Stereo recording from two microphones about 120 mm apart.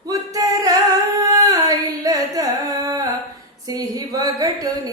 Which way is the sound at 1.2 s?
30° right (ahead or behind).